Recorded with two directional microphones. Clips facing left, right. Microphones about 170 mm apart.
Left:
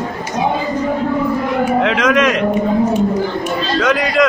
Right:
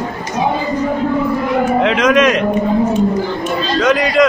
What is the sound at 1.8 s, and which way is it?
Speech, 20° right (ahead or behind).